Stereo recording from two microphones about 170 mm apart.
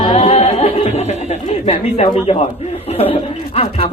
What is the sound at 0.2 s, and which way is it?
Music, 40° left (ahead or behind).